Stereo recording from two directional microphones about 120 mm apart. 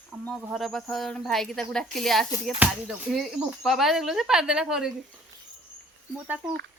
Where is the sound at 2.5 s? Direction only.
10° right (ahead or behind).